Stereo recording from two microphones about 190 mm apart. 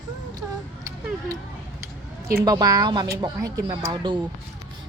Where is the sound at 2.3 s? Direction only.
20° right (ahead or behind).